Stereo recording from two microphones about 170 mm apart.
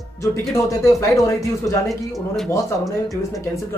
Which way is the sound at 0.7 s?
20° left (ahead or behind).